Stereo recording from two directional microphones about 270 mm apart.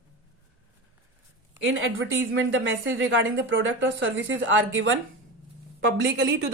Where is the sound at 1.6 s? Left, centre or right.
Right.